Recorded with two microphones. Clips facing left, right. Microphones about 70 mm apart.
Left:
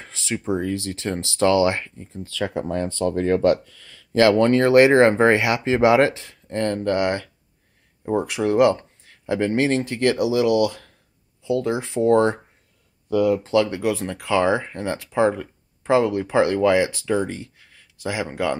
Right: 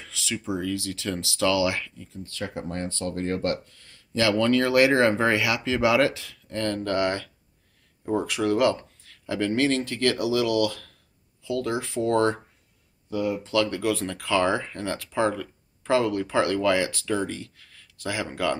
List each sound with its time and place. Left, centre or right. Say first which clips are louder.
0.0 s speech: left 4 dB; left
4.1 s speech: left 6 dB; left
13.1 s speech: left 8 dB; left
13.5 s speech: left 4 dB; left